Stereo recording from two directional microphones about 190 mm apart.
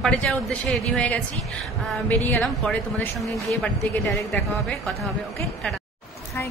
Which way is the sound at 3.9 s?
15° left (ahead or behind).